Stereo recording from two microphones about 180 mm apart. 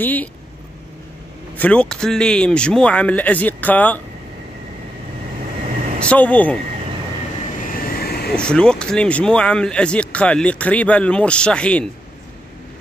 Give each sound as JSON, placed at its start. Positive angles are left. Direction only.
{"t": 0.0, "sound": "speech", "side_deg": 10}
{"t": 1.6, "sound": "speech", "side_deg": 5}
{"t": 5.9, "sound": "speech", "side_deg": 5}
{"t": 7.7, "sound": "vehicle", "side_deg": 55}
{"t": 8.4, "sound": "speech", "side_deg": 5}